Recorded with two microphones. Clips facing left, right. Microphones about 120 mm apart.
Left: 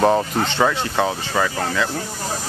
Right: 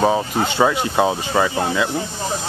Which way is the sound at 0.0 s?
5° right (ahead or behind).